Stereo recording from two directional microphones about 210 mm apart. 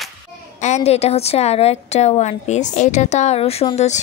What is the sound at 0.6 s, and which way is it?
A woman's voice, 30° left (ahead or behind).